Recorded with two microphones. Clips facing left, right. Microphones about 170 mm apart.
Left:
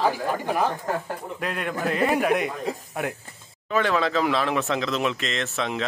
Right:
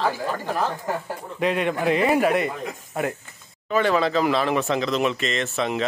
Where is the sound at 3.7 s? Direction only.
Centre (ahead or behind).